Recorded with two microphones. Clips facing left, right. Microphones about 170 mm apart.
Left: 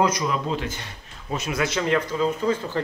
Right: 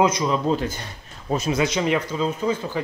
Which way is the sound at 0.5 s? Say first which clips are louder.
Right 5 dB; 40° right (ahead or behind).